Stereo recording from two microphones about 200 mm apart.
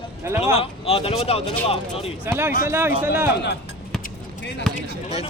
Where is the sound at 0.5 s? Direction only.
30° left (ahead or behind).